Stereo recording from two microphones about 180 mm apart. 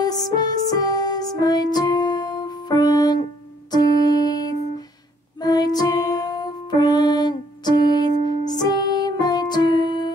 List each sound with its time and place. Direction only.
0.0 s music: 20° left (ahead or behind)